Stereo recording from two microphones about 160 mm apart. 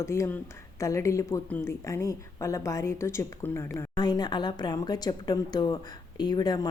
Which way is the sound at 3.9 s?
25° left (ahead or behind).